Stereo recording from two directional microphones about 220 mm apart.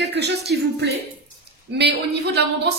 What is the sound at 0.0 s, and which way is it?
A woman's voice, 50° right (ahead or behind).